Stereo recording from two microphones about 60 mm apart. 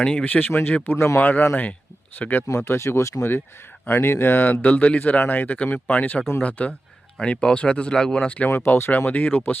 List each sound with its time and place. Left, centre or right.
0.0 s speech: centre
0.3 s speech: left
0.9 s speech: left
1.2 s speech: left
2.6 s speech: left
3.8 s speech: left; by 8.3 s centre
8.4 s speech: left